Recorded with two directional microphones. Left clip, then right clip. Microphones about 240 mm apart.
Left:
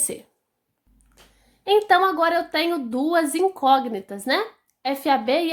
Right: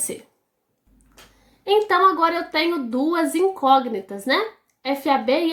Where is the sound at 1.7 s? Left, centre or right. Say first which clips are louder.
Right 1 dB; left.